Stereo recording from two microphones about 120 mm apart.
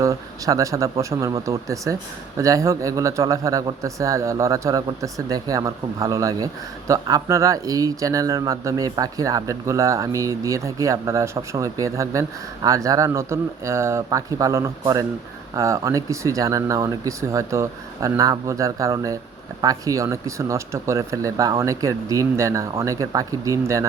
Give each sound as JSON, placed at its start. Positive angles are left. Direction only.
{"t": 0.0, "sound": "speech", "side_deg": -30}